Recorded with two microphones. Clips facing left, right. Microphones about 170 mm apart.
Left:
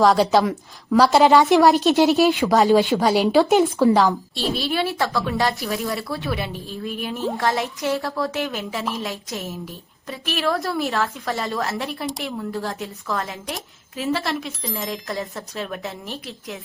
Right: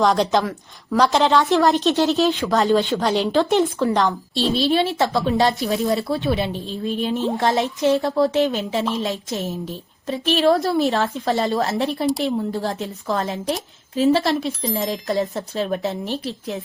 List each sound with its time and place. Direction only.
0.0 s a woman's voice: 5° left (ahead or behind)
1.3 s speech: 15° left (ahead or behind)
4.5 s a woman's voice: 25° right (ahead or behind)